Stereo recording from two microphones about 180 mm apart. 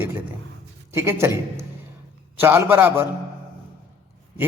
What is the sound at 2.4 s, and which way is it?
Speech, 10° right (ahead or behind).